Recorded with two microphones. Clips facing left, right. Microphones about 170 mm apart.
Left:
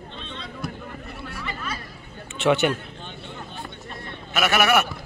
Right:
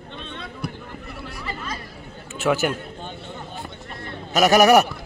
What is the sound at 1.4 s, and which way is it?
Chatter, 35° right (ahead or behind).